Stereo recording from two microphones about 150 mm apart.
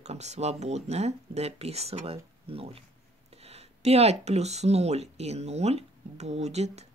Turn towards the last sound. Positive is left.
turn(degrees=-45)  # may be behind; listen again after turning